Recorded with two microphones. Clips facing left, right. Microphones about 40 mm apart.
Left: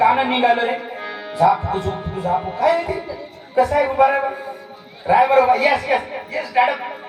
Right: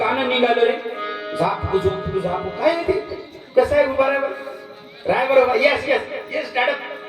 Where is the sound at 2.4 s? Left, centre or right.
Right.